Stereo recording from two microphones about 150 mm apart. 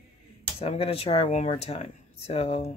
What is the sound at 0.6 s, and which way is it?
Speech, 40° left (ahead or behind).